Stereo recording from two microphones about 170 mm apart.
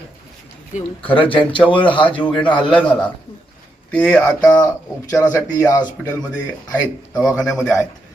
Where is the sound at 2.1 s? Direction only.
10° left (ahead or behind).